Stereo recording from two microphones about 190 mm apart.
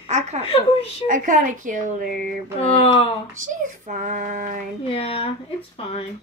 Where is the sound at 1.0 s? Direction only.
45° right (ahead or behind).